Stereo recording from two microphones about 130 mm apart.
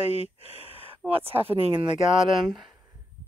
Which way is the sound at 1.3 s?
45° right (ahead or behind).